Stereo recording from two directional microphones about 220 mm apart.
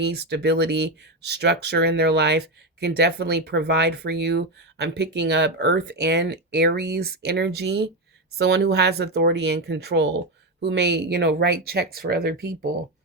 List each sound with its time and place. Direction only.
0.0 s speech: 50° right (ahead or behind)